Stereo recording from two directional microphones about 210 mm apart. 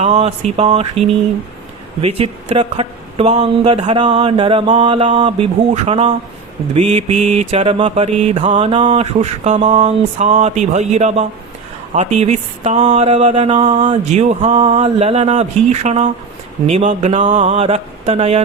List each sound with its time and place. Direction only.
0.0 s mantra: 30° right (ahead or behind)
16.6 s speech: 30° right (ahead or behind)